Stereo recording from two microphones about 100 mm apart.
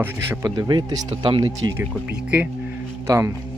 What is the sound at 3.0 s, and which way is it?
Speech, 30° right (ahead or behind).